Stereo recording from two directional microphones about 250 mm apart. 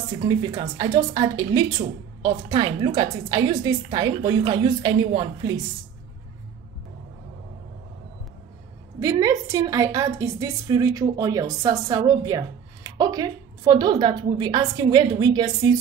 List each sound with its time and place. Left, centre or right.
0.1 s a woman's voice: centre
9.0 s a woman's voice: centre